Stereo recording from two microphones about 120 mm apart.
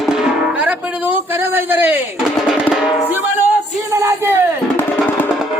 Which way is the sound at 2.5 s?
5° right (ahead or behind).